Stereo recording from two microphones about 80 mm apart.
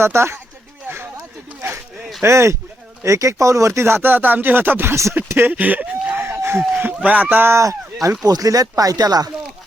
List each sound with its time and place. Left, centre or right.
0.0 s speech: right
2.2 s speech: right
8.2 s speech: right